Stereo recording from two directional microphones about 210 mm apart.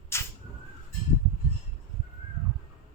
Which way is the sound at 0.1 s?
10° left (ahead or behind).